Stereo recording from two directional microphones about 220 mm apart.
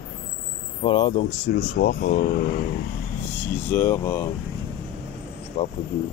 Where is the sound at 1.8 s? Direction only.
35° left (ahead or behind).